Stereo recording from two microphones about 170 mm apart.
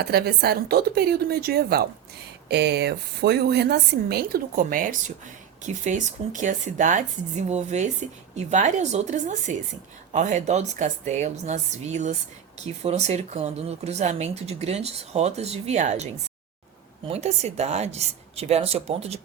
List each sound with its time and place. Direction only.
0.0 s a woman's voice: 70° right (ahead or behind)
2.5 s a woman's voice: 75° right (ahead or behind); by 16.0 s 40° right (ahead or behind)
17.1 s speech: 40° right (ahead or behind)